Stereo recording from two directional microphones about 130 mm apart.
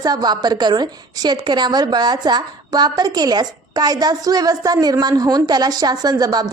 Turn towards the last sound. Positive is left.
turn(degrees=-30)  # may be behind; listen again after turning